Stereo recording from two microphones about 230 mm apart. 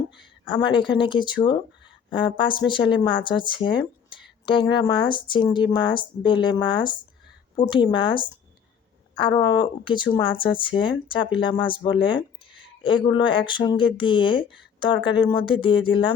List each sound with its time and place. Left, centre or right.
0.4 s speech: centre